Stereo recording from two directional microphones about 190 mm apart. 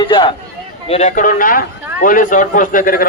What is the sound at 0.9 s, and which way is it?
A man's voice, 40° left (ahead or behind).